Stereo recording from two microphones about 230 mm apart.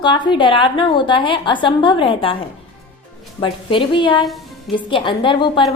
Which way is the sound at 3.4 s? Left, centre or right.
Left.